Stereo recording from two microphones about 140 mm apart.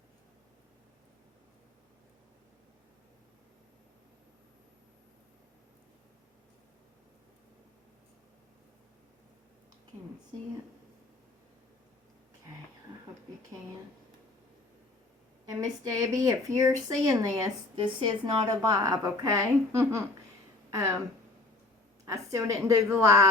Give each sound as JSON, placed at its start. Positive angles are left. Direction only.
{"t": 15.4, "sound": "speech", "side_deg": -25}
{"t": 22.0, "sound": "speech", "side_deg": -25}